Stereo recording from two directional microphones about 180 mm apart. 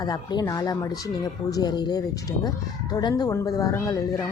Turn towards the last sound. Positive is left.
turn(degrees=15)  # may be behind; listen again after turning